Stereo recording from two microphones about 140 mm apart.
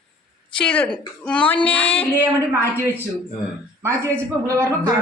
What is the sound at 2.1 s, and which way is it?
Speech, 15° right (ahead or behind).